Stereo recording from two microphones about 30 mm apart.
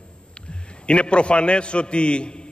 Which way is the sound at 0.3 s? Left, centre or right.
Left.